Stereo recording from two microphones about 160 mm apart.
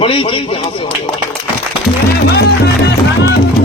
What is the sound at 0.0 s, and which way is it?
Speech, 35° left (ahead or behind).